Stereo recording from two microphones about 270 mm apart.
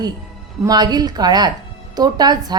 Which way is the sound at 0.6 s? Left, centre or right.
Centre.